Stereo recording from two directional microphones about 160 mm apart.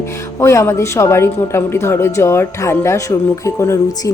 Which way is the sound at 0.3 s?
15° left (ahead or behind).